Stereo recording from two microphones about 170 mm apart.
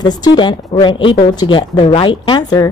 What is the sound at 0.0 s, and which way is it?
A woman's voice, 25° left (ahead or behind).